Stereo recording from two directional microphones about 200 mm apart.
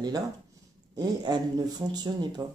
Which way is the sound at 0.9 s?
20° right (ahead or behind).